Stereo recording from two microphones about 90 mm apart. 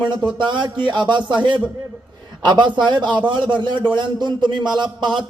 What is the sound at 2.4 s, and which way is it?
A man's voice, 60° right (ahead or behind).